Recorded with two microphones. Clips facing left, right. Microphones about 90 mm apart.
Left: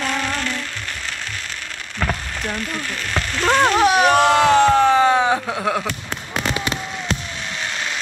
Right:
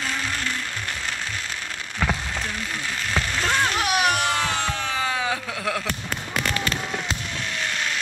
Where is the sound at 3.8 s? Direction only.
30° left (ahead or behind).